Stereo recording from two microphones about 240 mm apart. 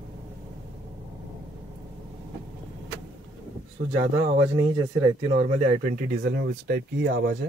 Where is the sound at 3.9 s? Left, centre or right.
Right.